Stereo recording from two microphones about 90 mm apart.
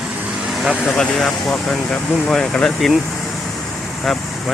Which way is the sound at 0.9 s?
5° left (ahead or behind).